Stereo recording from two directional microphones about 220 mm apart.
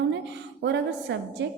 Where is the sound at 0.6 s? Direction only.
50° right (ahead or behind).